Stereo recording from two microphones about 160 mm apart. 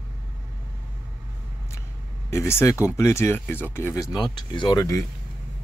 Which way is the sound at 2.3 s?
15° left (ahead or behind).